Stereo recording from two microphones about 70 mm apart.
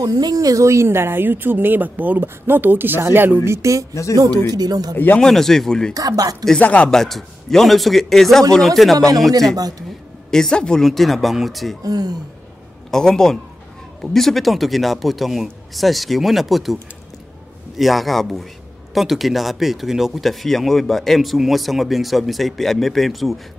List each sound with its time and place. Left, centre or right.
0.0 s speech: right
3.4 s speech: right
4.1 s speech: right
4.9 s speech: left
5.2 s speech: centre
5.9 s speech: right
6.6 s speech: centre
6.9 s speech: centre
9.6 s speech: right
10.3 s speech: centre
11.8 s speech: right
12.9 s a man's voice: centre
17.7 s speech: centre